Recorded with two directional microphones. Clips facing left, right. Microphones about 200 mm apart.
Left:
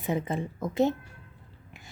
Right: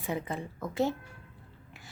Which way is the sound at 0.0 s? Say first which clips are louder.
Left 5 dB; 20° left (ahead or behind).